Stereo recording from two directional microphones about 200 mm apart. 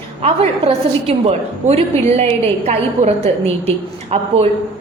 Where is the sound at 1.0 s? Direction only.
30° right (ahead or behind).